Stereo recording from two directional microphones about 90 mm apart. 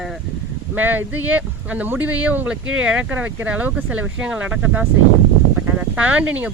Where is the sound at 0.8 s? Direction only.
20° right (ahead or behind).